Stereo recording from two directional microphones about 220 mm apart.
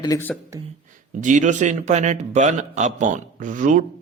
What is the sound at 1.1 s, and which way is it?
A man's voice, 35° right (ahead or behind).